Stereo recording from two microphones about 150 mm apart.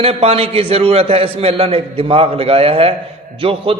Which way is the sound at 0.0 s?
40° right (ahead or behind).